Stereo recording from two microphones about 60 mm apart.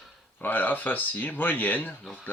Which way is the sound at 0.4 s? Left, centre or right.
Left.